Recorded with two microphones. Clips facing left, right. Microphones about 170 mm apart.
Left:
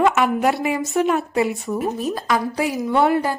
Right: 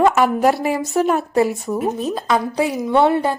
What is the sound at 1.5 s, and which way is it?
Speech, centre (ahead or behind).